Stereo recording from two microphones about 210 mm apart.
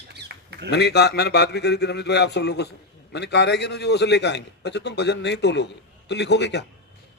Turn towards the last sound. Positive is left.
turn(degrees=55)  # may be behind; listen again after turning